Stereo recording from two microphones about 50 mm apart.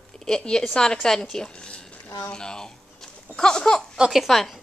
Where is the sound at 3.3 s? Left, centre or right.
Centre.